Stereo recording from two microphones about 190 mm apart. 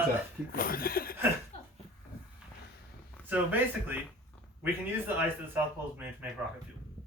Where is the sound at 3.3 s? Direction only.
10° right (ahead or behind).